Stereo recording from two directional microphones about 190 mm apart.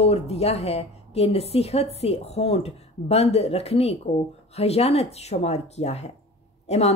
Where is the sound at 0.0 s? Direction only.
35° left (ahead or behind).